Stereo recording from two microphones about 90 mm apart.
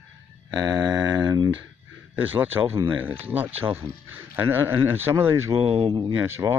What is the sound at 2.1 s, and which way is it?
Speech, 20° right (ahead or behind).